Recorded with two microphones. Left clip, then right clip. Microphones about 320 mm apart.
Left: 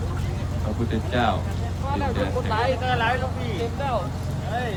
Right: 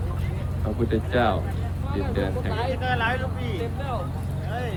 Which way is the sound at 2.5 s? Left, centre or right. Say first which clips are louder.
Left 5 dB; left.